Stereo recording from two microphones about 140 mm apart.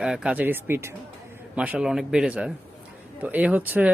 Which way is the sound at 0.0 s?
5° right (ahead or behind).